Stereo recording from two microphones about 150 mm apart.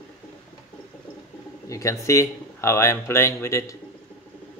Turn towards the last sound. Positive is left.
turn(degrees=20)  # may be behind; listen again after turning